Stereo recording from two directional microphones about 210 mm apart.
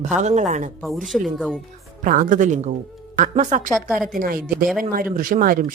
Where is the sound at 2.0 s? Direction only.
40° right (ahead or behind).